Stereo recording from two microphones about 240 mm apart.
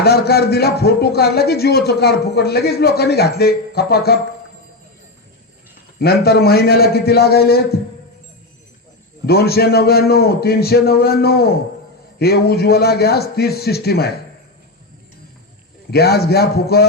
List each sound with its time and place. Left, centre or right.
0.0 s a man's voice: left
6.0 s a man's voice: left
9.2 s a man's voice: left
15.9 s a man's voice: left